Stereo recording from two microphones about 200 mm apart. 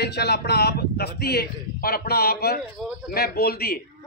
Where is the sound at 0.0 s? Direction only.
55° left (ahead or behind).